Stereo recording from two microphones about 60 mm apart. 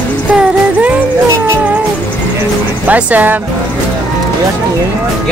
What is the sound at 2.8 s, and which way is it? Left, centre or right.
Speech, right.